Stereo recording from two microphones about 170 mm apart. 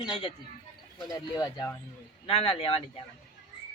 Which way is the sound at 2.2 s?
35° left (ahead or behind).